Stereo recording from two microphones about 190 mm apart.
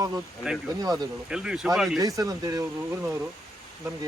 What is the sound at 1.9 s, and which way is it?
Speech, 20° right (ahead or behind).